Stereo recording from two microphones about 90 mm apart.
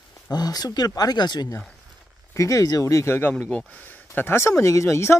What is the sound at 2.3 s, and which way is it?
Speech, 40° left (ahead or behind).